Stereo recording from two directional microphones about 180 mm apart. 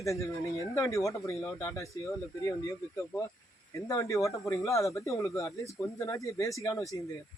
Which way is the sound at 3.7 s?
20° left (ahead or behind).